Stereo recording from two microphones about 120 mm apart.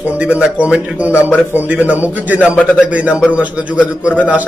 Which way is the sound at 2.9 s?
10° right (ahead or behind).